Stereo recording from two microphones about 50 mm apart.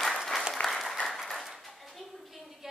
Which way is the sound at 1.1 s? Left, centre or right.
Centre.